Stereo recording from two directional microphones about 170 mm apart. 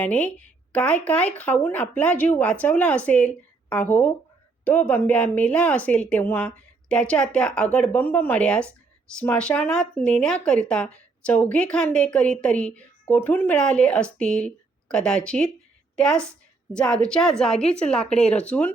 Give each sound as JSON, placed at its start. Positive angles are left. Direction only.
{"t": 0.0, "sound": "a woman's voice", "side_deg": 10}